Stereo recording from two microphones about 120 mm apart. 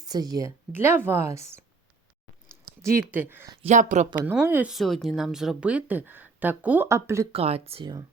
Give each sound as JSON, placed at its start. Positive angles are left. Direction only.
{"t": 0.0, "sound": "a woman's voice", "side_deg": -35}
{"t": 0.7, "sound": "speech", "side_deg": -20}
{"t": 3.1, "sound": "speech", "side_deg": -15}
{"t": 3.7, "sound": "speech", "side_deg": -90}
{"t": 4.3, "sound": "speech", "side_deg": -15}
{"t": 4.7, "sound": "speech", "side_deg": 0}
{"t": 7.3, "sound": "speech", "side_deg": -55}